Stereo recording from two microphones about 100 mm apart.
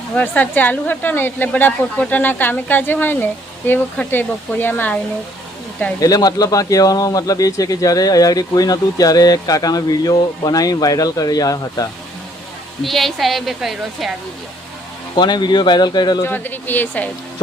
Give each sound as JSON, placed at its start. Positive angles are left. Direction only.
{"t": 0.2, "sound": "speech", "side_deg": 15}
{"t": 6.0, "sound": "speech", "side_deg": 40}
{"t": 12.8, "sound": "a woman's voice", "side_deg": 0}
{"t": 15.1, "sound": "speech", "side_deg": 50}
{"t": 16.2, "sound": "speech", "side_deg": 20}